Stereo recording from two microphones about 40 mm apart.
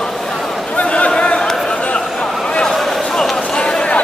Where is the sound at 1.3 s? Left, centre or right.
Centre.